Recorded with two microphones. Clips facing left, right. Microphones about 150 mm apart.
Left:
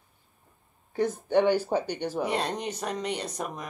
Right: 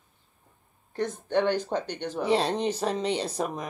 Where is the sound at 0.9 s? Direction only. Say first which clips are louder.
Left 2 dB; 10° left (ahead or behind).